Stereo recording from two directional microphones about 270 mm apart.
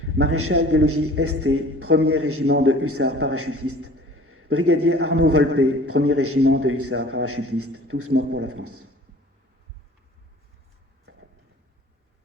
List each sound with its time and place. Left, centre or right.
0.0 s a man's voice: right